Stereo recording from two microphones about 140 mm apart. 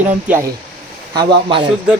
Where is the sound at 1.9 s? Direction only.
5° right (ahead or behind).